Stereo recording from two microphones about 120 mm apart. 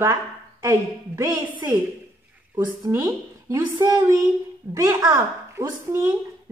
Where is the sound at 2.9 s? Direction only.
25° right (ahead or behind).